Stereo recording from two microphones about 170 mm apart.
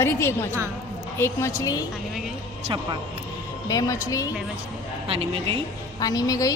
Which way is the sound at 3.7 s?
20° left (ahead or behind).